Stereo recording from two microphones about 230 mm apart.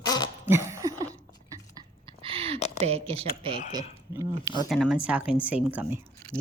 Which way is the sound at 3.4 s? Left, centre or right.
Centre.